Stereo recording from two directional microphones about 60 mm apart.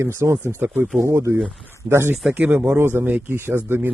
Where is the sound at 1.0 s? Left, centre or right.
Right.